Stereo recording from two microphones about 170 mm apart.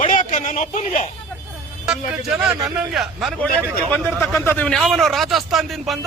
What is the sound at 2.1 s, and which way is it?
A man's voice, 5° right (ahead or behind).